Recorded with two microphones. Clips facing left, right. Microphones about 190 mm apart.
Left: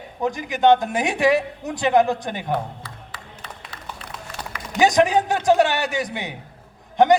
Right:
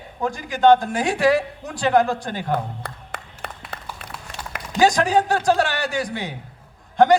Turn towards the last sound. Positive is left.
turn(degrees=20)  # may be behind; listen again after turning